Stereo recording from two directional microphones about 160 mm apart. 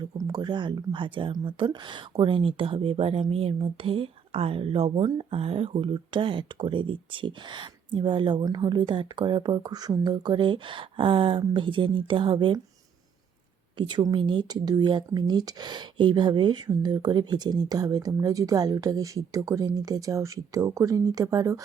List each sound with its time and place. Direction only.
0.0 s speech: 25° right (ahead or behind)
13.7 s speech: 30° right (ahead or behind)